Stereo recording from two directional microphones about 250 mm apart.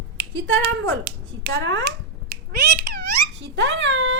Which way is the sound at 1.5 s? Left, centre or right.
Right.